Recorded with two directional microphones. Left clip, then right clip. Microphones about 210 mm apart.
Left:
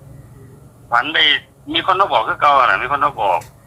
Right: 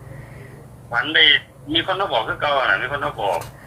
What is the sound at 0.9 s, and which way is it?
A man's voice, 50° left (ahead or behind).